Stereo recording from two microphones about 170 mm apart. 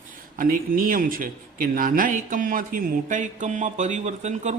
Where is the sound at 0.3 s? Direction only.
55° right (ahead or behind).